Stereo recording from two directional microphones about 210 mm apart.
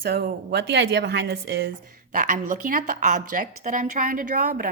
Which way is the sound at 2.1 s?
40° right (ahead or behind).